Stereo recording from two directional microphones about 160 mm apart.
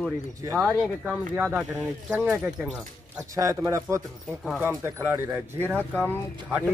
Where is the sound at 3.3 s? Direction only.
20° right (ahead or behind).